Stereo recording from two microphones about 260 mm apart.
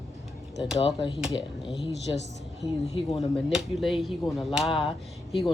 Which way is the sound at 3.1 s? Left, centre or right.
Centre.